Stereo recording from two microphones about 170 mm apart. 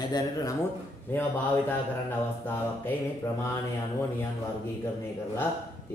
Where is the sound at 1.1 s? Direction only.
10° left (ahead or behind).